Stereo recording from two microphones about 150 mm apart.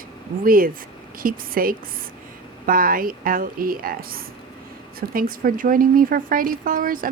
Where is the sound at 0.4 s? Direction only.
70° right (ahead or behind).